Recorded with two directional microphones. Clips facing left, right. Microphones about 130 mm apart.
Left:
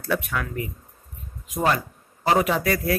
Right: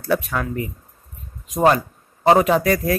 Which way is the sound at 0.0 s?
35° right (ahead or behind).